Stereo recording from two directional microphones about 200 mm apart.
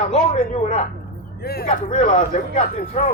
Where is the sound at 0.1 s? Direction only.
35° left (ahead or behind).